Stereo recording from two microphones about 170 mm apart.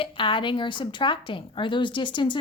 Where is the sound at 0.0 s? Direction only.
30° left (ahead or behind).